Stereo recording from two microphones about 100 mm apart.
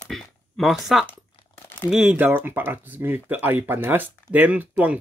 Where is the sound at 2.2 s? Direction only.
20° right (ahead or behind).